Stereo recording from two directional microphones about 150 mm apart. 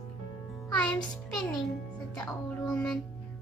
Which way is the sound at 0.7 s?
10° left (ahead or behind).